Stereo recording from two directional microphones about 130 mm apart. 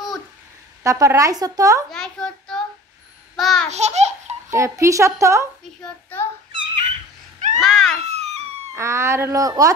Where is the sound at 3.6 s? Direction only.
60° right (ahead or behind).